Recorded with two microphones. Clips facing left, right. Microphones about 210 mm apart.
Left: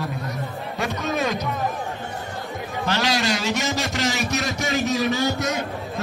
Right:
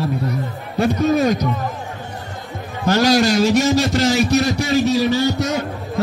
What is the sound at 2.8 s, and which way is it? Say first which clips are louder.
Speech: right 9 dB; 40° right (ahead or behind).